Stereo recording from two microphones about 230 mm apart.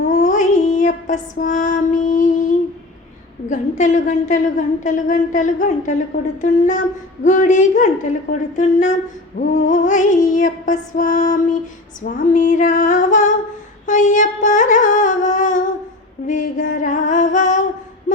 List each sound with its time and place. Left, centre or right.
0.1 s female singing: left
3.5 s a woman's voice: left